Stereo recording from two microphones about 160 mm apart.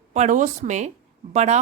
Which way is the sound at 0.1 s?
50° right (ahead or behind).